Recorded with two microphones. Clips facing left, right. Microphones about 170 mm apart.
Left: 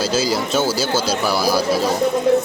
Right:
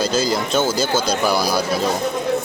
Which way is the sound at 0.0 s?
5° left (ahead or behind).